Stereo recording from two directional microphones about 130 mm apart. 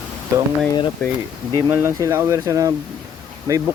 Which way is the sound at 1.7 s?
20° right (ahead or behind).